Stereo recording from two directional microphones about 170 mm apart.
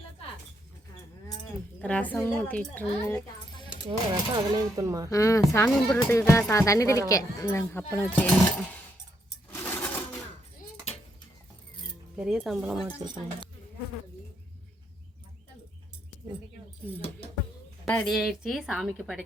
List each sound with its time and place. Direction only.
1.8 s speech: 10° left (ahead or behind)
3.8 s speech: 20° right (ahead or behind)
5.0 s speech: 20° left (ahead or behind)
9.5 s sewing machine: 10° left (ahead or behind)
12.1 s a woman's voice: 5° right (ahead or behind)
17.8 s a woman's voice: 5° left (ahead or behind)